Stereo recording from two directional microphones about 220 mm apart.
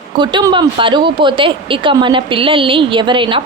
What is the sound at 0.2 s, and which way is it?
A woman's voice, 20° right (ahead or behind).